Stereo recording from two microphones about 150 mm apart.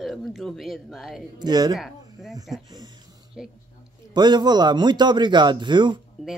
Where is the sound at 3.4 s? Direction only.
5° right (ahead or behind).